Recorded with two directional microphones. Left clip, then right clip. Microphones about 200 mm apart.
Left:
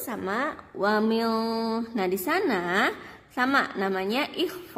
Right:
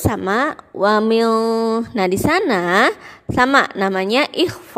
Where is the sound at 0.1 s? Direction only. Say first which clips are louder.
Right 10 dB; 45° right (ahead or behind).